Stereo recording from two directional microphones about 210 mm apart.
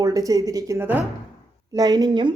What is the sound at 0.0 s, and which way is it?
A woman's voice, 15° right (ahead or behind).